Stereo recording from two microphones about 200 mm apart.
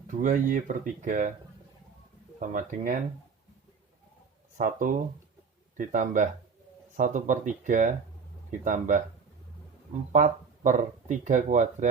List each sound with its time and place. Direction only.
0.1 s speech: 40° right (ahead or behind)
2.4 s speech: 40° right (ahead or behind)
4.5 s speech: 40° right (ahead or behind)
10.1 s speech: 35° right (ahead or behind)